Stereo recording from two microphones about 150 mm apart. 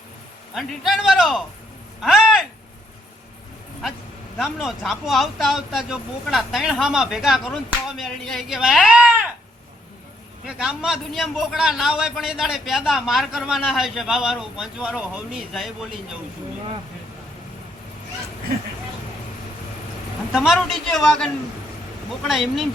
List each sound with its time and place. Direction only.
0.5 s a man's voice: centre (ahead or behind)
4.4 s a man's voice: 5° right (ahead or behind)
10.4 s a man's voice: 5° right (ahead or behind)
20.3 s a man's voice: 5° right (ahead or behind)